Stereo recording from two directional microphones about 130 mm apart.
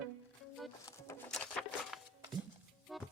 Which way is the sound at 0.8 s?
20° left (ahead or behind).